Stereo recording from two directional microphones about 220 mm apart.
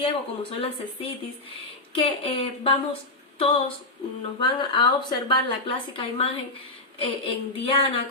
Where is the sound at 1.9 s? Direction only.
25° left (ahead or behind).